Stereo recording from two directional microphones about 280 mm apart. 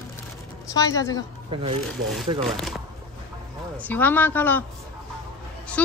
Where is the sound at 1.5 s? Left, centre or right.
Centre.